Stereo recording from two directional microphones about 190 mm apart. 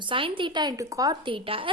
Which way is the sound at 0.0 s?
25° right (ahead or behind).